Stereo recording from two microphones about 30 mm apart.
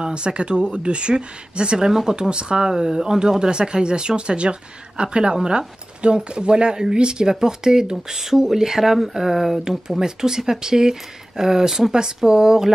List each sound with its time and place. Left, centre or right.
0.0 s speech: right
4.4 s speech: right; by 9.6 s centre
9.7 s speech: right
11.9 s speech: right